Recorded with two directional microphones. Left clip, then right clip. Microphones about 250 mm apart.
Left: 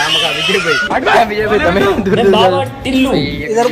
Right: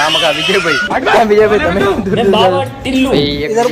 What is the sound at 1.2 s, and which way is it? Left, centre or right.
Speech, right.